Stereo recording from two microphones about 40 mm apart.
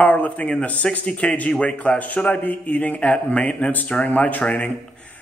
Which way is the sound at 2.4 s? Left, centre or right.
Left.